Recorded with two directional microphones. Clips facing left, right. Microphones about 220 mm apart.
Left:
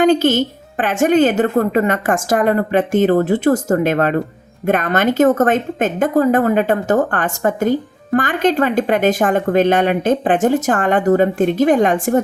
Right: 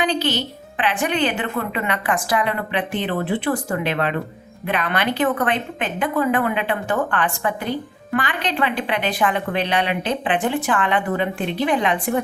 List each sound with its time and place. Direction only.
0.0 s a woman's voice: 45° left (ahead or behind)